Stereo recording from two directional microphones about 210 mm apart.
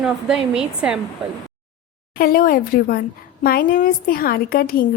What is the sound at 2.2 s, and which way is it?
A woman's voice, 45° left (ahead or behind).